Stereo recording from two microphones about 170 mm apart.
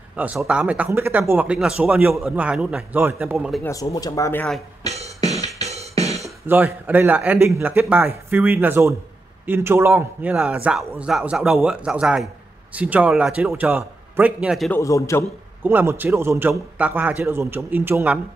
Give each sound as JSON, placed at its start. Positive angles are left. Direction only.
{"t": 0.1, "sound": "speech", "side_deg": -10}
{"t": 3.6, "sound": "speech", "side_deg": 20}
{"t": 4.8, "sound": "music", "side_deg": -40}
{"t": 6.4, "sound": "a man's voice", "side_deg": -10}
{"t": 14.7, "sound": "speech", "side_deg": 20}
{"t": 15.6, "sound": "speech", "side_deg": -10}